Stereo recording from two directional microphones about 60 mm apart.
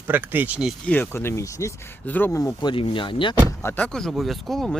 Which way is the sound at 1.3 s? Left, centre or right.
Left.